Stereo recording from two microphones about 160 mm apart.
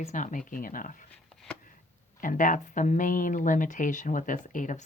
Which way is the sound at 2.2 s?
55° left (ahead or behind).